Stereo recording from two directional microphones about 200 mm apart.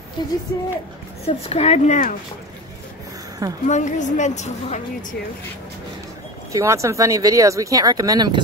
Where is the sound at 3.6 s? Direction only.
35° left (ahead or behind).